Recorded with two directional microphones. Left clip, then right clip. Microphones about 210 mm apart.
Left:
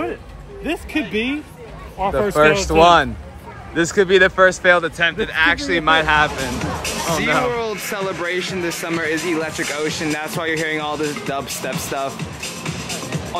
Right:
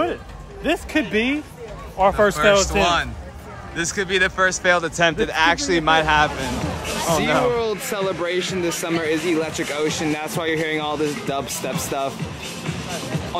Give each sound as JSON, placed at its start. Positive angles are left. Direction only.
{"t": 0.7, "sound": "speech", "side_deg": -20}
{"t": 2.2, "sound": "speech", "side_deg": 5}
{"t": 6.3, "sound": "speech", "side_deg": 0}